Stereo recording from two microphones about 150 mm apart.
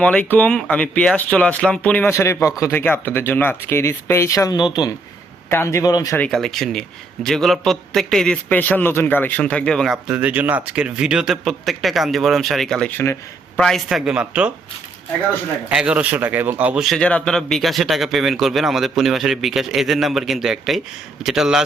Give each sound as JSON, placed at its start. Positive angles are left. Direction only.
{"t": 0.0, "sound": "speech", "side_deg": 10}
{"t": 5.5, "sound": "a man's voice", "side_deg": 15}
{"t": 6.1, "sound": "a man's voice", "side_deg": 5}
{"t": 12.9, "sound": "speech", "side_deg": 15}
{"t": 13.6, "sound": "a man's voice", "side_deg": 5}
{"t": 15.7, "sound": "a man's voice", "side_deg": -5}